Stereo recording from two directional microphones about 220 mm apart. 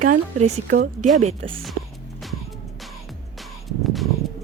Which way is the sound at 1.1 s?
30° right (ahead or behind).